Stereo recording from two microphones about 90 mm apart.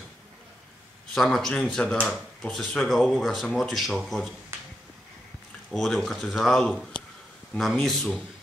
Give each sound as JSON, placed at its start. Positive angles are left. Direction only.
{"t": 1.1, "sound": "speech", "side_deg": 5}
{"t": 5.7, "sound": "speech", "side_deg": 0}
{"t": 7.7, "sound": "speech", "side_deg": 10}